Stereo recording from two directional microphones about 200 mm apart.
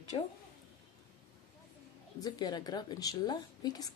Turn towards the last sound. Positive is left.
turn(degrees=20)  # may be behind; listen again after turning